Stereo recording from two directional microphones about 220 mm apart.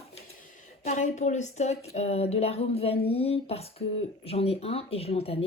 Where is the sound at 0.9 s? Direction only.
35° left (ahead or behind).